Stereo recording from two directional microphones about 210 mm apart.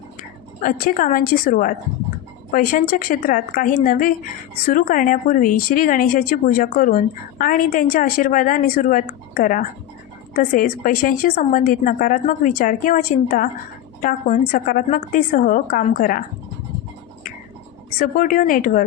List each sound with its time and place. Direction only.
0.2 s a woman's voice: 40° left (ahead or behind)
17.9 s a woman's voice: 40° left (ahead or behind)